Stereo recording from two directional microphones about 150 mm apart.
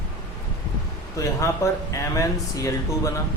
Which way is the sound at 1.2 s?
20° left (ahead or behind).